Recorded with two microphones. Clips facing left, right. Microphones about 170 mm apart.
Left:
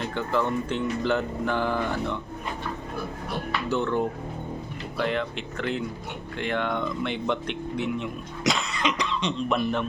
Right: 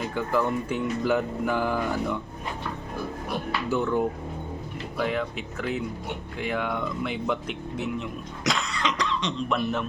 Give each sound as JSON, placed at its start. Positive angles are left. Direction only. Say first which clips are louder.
{"t": 0.0, "sound": "speech", "louder": "right 1 dB", "side_deg": -5}
{"t": 3.7, "sound": "speech", "louder": "right 1 dB", "side_deg": -10}
{"t": 8.7, "sound": "cough", "louder": "left 1 dB", "side_deg": 20}
{"t": 9.5, "sound": "speech", "louder": "left 1 dB", "side_deg": 0}